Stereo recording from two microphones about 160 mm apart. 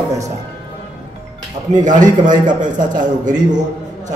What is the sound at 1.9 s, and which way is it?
A man's voice, 55° right (ahead or behind).